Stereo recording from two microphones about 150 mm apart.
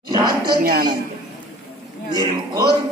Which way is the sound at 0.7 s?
80° right.